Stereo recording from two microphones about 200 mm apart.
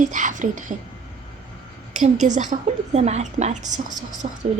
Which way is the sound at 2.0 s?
35° right (ahead or behind).